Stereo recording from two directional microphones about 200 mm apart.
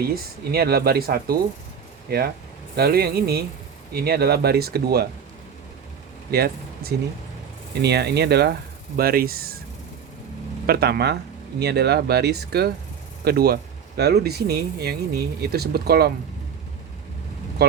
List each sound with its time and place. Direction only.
0.1 s speech: 50° right (ahead or behind)
6.3 s speech: 50° right (ahead or behind)
10.7 s speech: 50° right (ahead or behind)
17.6 s speech: 55° right (ahead or behind)